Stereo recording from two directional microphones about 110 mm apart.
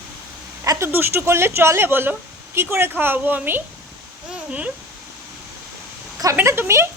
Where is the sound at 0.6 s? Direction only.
25° right (ahead or behind).